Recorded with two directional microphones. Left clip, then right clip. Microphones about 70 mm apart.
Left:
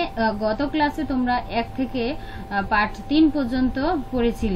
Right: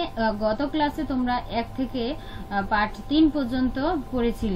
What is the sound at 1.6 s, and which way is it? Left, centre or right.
A woman's voice, right.